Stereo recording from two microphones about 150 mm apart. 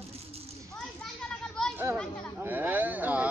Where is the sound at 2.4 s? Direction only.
10° right (ahead or behind).